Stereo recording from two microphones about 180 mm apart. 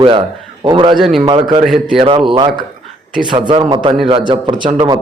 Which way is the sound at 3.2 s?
25° right (ahead or behind).